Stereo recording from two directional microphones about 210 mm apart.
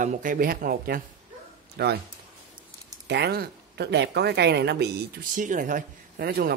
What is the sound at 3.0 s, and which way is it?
Speech, 50° right (ahead or behind).